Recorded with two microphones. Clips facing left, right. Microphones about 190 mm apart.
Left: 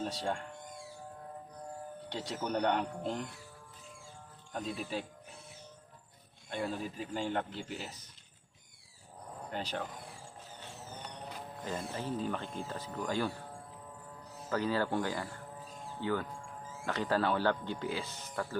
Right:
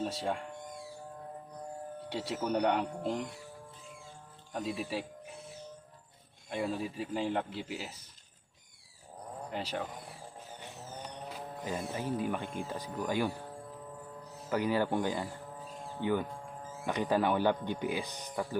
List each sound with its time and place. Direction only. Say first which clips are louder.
0.0 s a man's voice: right 2 dB; 5° right (ahead or behind)
2.0 s a man's voice: right 3 dB; 5° right (ahead or behind)
4.5 s a man's voice: right 2 dB; 5° right (ahead or behind)
6.5 s a man's voice: right 2 dB; 5° right (ahead or behind)
9.5 s a man's voice: right 1 dB; 5° right (ahead or behind)
11.6 s speech: right 2 dB; 10° right (ahead or behind)
14.5 s speech: right 2 dB; 15° right (ahead or behind)